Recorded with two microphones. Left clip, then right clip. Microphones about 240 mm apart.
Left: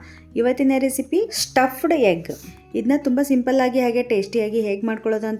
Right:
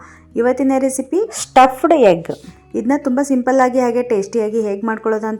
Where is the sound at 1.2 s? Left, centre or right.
Centre.